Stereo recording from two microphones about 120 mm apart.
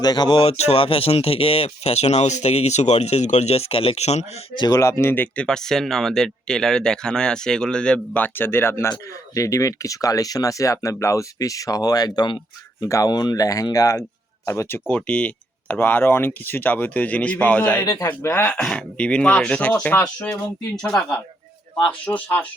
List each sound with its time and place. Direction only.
0.0 s speech: 35° left (ahead or behind)
0.5 s speech: 60° left (ahead or behind)
4.5 s speech: 40° left (ahead or behind)
4.8 s speech: 25° left (ahead or behind)
12.8 s speech: 25° left (ahead or behind)
18.6 s speech: 10° left (ahead or behind)